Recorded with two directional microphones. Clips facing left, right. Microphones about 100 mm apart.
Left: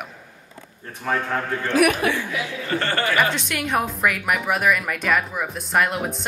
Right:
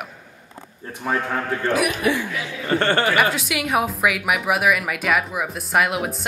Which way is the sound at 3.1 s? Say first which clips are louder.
Right 1 dB; 5° right (ahead or behind).